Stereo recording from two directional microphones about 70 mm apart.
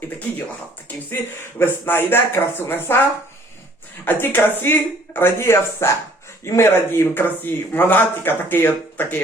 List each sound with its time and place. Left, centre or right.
1.5 s speech: left
4.0 s speech: left
7.1 s speech: left